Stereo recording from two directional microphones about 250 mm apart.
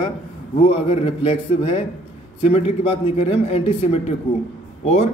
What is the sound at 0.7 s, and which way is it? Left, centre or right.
A man's voice, left.